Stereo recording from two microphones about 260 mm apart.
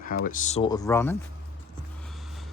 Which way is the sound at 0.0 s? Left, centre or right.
Left.